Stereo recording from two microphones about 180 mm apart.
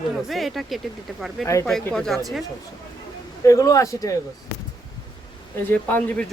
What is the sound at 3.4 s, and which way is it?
Speech, 20° left (ahead or behind).